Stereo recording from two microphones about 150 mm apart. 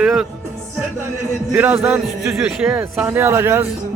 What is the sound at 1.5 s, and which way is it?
A man's voice, 10° right (ahead or behind).